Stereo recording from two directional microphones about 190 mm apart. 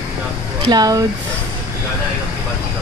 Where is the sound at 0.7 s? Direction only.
20° right (ahead or behind).